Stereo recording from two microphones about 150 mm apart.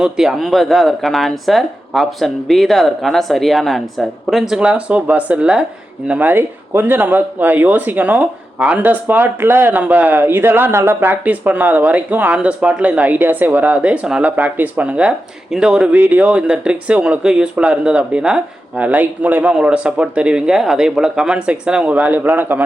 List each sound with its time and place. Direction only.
0.0 s speech: 5° right (ahead or behind)